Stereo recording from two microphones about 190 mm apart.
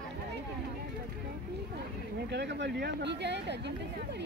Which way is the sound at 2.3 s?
65° right (ahead or behind).